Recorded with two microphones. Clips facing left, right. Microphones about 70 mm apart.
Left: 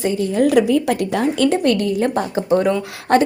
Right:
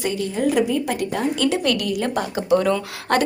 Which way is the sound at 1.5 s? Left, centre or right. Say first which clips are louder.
Left 4 dB; left.